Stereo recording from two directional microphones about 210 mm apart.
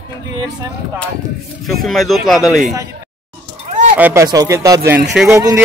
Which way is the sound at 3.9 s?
10° right (ahead or behind).